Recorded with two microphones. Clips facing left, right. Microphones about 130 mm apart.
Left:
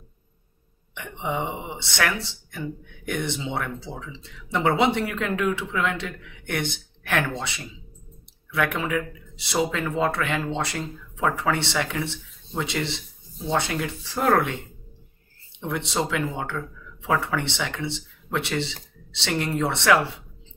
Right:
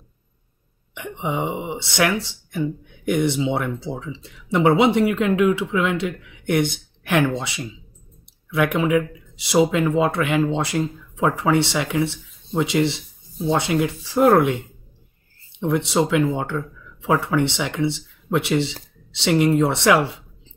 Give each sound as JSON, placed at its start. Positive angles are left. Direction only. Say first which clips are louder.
{"t": 0.9, "sound": "speech", "louder": "right 3 dB", "side_deg": -15}
{"t": 15.7, "sound": "speech", "louder": "right 7 dB", "side_deg": -15}